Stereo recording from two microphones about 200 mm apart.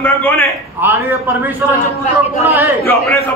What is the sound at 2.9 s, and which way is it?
Speech, 10° left (ahead or behind).